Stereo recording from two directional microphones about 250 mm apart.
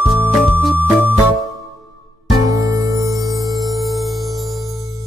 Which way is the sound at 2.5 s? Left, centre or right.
Centre.